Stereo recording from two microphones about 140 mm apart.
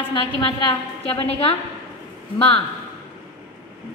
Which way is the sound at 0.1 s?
40° left (ahead or behind).